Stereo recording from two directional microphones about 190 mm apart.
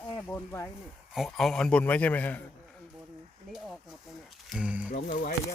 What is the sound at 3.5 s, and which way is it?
Speech, centre (ahead or behind).